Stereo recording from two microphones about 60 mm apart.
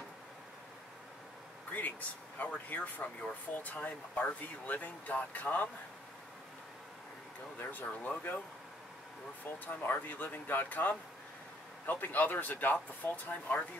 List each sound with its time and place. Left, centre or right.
1.7 s speech: left
7.5 s speech: left
9.7 s speech: left